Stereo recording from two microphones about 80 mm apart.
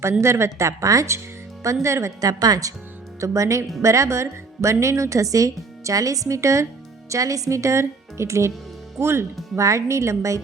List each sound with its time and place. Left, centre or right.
0.0 s speech: right